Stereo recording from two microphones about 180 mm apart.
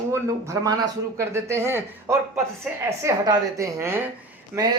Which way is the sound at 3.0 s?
20° right (ahead or behind).